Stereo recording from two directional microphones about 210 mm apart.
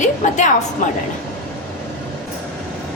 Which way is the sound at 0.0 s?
35° left (ahead or behind).